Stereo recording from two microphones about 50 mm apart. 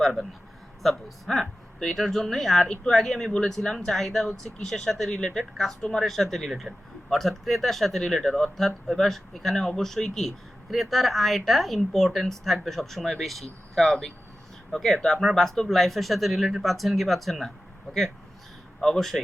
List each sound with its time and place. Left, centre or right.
0.0 s speech: centre
18.8 s speech: centre